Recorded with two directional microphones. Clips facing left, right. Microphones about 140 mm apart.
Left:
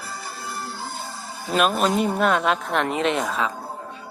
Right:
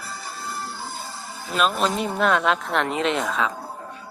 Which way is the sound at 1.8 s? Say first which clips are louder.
Left 3 dB; centre (ahead or behind).